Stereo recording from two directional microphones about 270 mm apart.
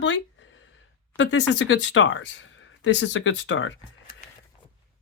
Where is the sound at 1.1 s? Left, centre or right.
Left.